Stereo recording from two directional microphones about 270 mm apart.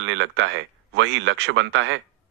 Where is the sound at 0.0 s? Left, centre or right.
Right.